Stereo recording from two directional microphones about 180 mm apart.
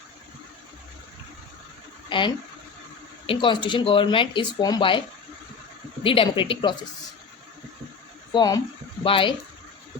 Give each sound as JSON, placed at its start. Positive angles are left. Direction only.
{"t": 2.0, "sound": "speech", "side_deg": 25}
{"t": 8.3, "sound": "speech", "side_deg": 20}